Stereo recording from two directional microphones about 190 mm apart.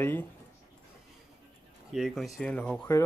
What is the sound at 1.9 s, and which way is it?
Speech, centre (ahead or behind).